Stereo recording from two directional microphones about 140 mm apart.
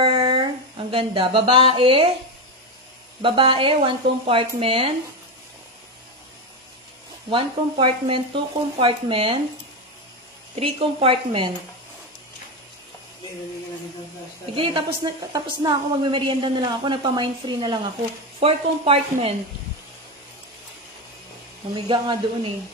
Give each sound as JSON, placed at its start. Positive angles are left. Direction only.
{"t": 0.0, "sound": "a sound", "side_deg": -40}
{"t": 3.2, "sound": "a woman's voice", "side_deg": -40}
{"t": 7.2, "sound": "a woman's voice", "side_deg": -40}
{"t": 10.5, "sound": "a woman's voice", "side_deg": -40}
{"t": 14.5, "sound": "a woman's voice", "side_deg": -40}
{"t": 18.4, "sound": "speech", "side_deg": -45}
{"t": 21.7, "sound": "a woman's voice", "side_deg": -35}